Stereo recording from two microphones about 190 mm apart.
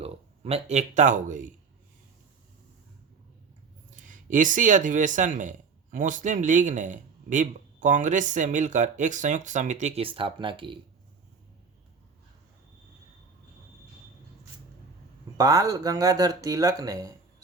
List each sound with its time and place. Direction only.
0.0 s speech: 30° right (ahead or behind)
3.9 s speech: 40° right (ahead or behind); by 10.8 s 25° right (ahead or behind)
15.4 s speech: 20° right (ahead or behind)